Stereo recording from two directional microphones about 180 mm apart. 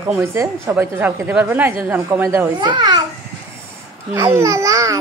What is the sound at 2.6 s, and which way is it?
Speech, 25° right (ahead or behind).